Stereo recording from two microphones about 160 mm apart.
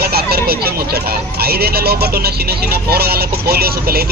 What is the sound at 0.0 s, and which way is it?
Speech, 75° right (ahead or behind).